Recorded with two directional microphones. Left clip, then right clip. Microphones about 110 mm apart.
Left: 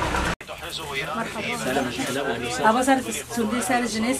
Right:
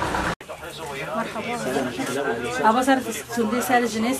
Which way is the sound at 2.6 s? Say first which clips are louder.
Right 1 dB; 5° right (ahead or behind).